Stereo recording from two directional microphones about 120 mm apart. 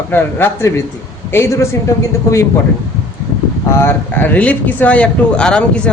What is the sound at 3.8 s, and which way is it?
Speech, 15° left (ahead or behind).